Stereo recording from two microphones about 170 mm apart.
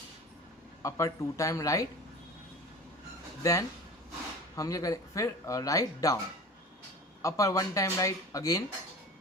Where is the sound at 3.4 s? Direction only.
20° left (ahead or behind).